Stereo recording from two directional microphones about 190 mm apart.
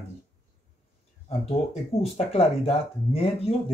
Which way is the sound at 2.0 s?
30° left (ahead or behind).